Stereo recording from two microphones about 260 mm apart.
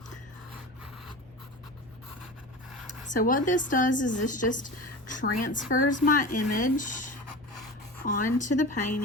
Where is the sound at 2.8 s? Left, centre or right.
Left.